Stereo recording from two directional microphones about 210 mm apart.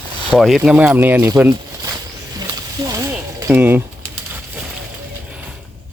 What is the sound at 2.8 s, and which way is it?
Mechanisms, 15° right (ahead or behind).